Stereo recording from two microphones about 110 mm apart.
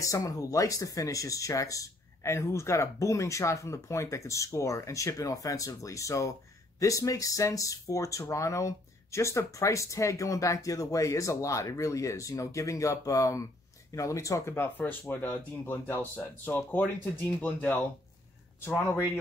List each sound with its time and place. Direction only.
0.0 s speech: 30° left (ahead or behind); by 17.7 s 15° left (ahead or behind)